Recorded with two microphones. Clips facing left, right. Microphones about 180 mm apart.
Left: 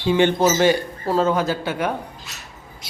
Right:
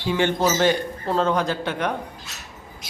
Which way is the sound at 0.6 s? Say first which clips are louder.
Left 3 dB; 10° left (ahead or behind).